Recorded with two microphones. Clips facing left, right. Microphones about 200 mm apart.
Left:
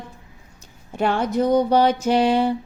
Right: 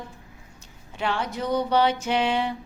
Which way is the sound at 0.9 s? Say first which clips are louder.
Left 8 dB; 45° left (ahead or behind).